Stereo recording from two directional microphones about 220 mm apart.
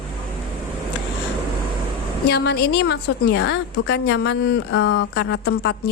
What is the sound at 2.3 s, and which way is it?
Speech, 50° left (ahead or behind).